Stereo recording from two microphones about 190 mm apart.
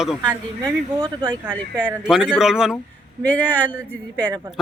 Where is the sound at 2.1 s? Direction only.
5° right (ahead or behind).